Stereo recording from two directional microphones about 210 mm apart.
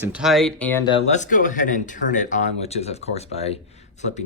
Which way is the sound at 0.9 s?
35° left (ahead or behind).